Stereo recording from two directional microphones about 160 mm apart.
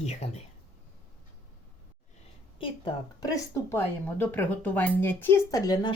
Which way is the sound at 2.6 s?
30° left (ahead or behind).